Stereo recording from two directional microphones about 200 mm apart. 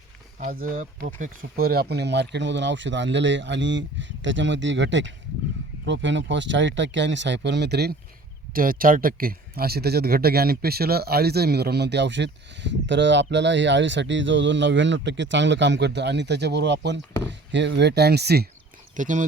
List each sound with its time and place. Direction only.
0.3 s speech: 40° right (ahead or behind)
18.9 s speech: 40° right (ahead or behind)